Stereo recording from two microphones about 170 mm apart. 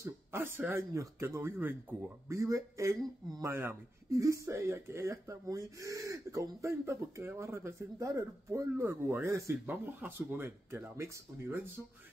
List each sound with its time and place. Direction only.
0.0 s speech: 15° right (ahead or behind)